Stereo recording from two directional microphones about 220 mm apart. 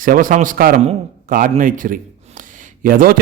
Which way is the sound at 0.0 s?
40° right (ahead or behind).